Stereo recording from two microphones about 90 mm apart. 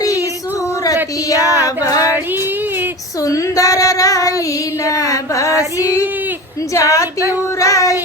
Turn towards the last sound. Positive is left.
turn(degrees=35)  # may be behind; listen again after turning